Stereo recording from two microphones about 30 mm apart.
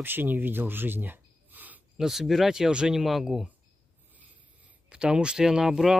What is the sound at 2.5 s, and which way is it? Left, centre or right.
Speech, right.